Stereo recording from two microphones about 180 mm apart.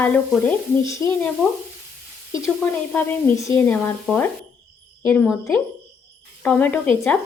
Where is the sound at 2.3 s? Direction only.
15° left (ahead or behind).